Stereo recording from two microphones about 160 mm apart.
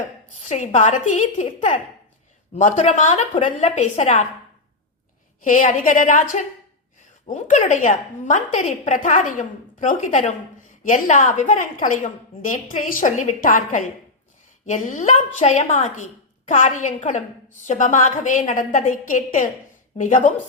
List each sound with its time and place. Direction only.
0.3 s a woman's voice: 50° left (ahead or behind)
2.6 s a woman's voice: 50° left (ahead or behind)
5.4 s a woman's voice: 55° left (ahead or behind)